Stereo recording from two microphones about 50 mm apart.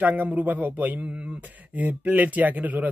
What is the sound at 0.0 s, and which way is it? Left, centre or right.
A man's voice, right.